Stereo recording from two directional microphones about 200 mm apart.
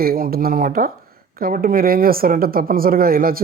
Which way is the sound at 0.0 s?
45° right (ahead or behind).